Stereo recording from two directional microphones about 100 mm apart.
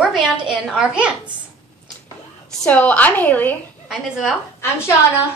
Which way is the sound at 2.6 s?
15° left (ahead or behind).